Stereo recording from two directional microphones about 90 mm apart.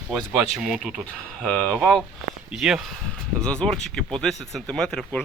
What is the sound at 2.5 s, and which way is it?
Speech, 5° right (ahead or behind).